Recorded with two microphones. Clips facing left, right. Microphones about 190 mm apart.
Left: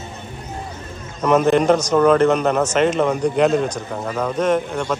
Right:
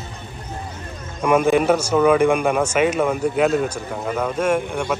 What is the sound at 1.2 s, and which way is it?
Speech, 10° right (ahead or behind).